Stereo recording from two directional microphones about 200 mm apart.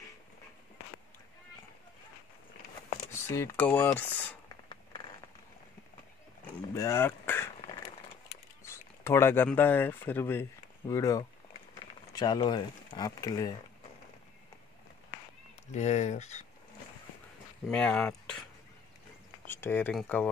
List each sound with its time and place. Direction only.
3.3 s speech: 10° left (ahead or behind)
6.7 s a sound: 15° left (ahead or behind)
9.0 s speech: 15° left (ahead or behind)
15.7 s speech: 35° left (ahead or behind)
17.6 s speech: 5° left (ahead or behind)
19.4 s speech: 10° left (ahead or behind)